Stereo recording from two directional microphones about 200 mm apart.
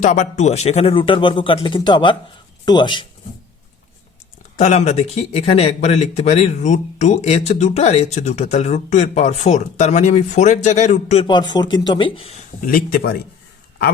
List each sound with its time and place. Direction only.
0.0 s speech: 40° left (ahead or behind)
4.5 s speech: 35° left (ahead or behind)
12.6 s speech: 45° left (ahead or behind)